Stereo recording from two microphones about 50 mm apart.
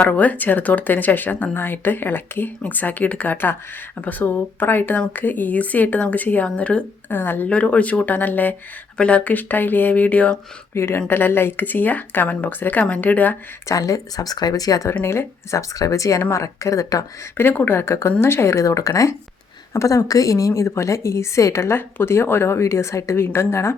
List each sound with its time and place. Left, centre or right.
0.0 s speech: left
7.1 s speech: left
7.4 s speech: left
9.0 s speech: left
10.8 s a woman's voice: left
12.8 s speech: left
13.7 s speech: left
15.0 s speech: left
17.5 s speech: left
17.7 s a woman's voice: left
18.2 s a woman's voice: left
21.8 s a woman's voice: left